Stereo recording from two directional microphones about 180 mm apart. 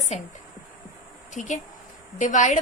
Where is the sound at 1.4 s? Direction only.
40° left (ahead or behind).